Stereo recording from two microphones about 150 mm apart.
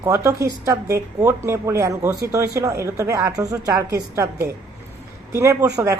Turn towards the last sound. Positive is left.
turn(degrees=-20)  # may be behind; listen again after turning